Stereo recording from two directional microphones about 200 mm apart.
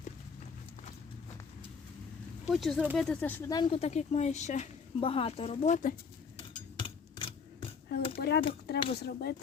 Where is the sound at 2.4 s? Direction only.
Centre (ahead or behind).